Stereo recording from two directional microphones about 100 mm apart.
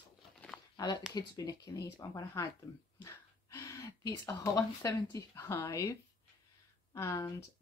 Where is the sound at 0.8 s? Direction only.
40° left (ahead or behind).